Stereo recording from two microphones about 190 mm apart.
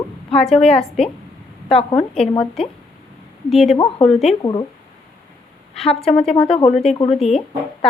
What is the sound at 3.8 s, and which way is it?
Speech, 30° left (ahead or behind).